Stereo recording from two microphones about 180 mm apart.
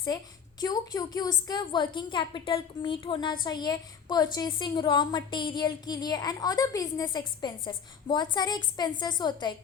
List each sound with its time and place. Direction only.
0.6 s a woman's voice: 20° left (ahead or behind)